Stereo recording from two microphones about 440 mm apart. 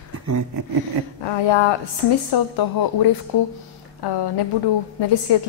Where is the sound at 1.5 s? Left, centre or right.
Left.